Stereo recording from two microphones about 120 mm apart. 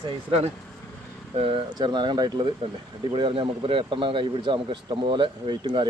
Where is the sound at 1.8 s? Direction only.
40° right (ahead or behind).